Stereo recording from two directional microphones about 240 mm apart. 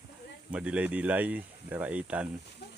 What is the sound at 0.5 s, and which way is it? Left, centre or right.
Speech, centre.